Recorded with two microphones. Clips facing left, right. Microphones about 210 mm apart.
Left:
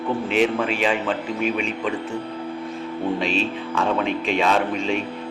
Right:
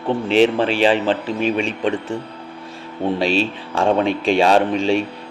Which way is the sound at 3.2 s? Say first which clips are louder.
Right 4 dB; 30° right (ahead or behind).